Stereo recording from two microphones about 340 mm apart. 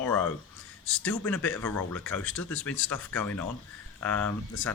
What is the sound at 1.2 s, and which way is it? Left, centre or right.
Speech, centre.